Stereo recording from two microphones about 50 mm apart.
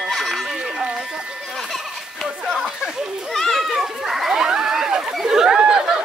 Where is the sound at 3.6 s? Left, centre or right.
Centre.